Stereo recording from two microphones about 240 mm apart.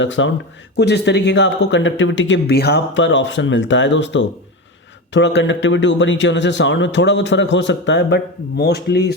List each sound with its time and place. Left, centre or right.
0.0 s speech: left